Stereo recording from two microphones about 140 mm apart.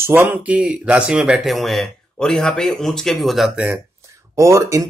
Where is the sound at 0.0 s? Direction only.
15° right (ahead or behind).